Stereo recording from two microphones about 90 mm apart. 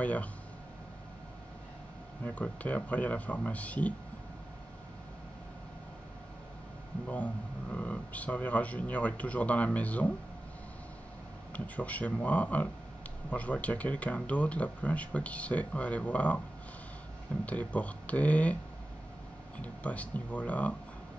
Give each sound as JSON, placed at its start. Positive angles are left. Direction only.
{"t": 0.0, "sound": "speech", "side_deg": 15}
{"t": 2.2, "sound": "speech", "side_deg": 15}
{"t": 7.1, "sound": "speech", "side_deg": 15}
{"t": 11.5, "sound": "speech", "side_deg": 15}
{"t": 17.5, "sound": "speech", "side_deg": 15}
{"t": 19.6, "sound": "speech", "side_deg": 15}